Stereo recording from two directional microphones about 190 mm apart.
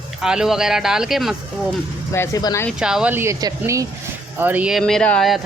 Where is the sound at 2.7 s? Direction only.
5° right (ahead or behind).